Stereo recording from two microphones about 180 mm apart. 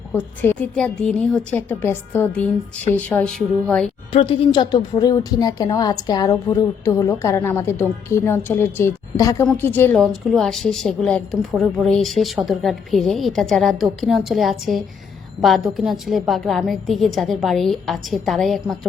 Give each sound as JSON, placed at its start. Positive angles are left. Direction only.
{"t": 0.1, "sound": "a woman's voice", "side_deg": 10}
{"t": 4.1, "sound": "a woman's voice", "side_deg": 30}